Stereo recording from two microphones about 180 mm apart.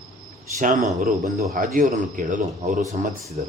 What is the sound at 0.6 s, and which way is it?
A man's voice, 45° right (ahead or behind).